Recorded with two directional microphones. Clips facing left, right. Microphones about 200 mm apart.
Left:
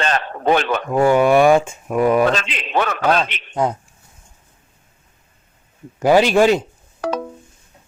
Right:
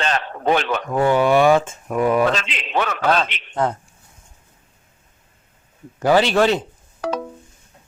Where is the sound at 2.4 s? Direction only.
45° left (ahead or behind).